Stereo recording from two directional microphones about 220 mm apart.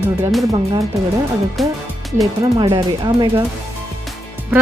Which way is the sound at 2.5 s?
20° right (ahead or behind).